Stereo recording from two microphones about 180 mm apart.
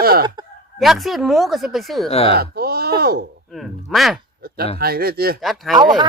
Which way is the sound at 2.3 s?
60° right (ahead or behind).